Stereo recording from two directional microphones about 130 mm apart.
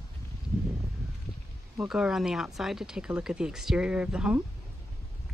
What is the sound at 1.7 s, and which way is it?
Speech, 5° right (ahead or behind).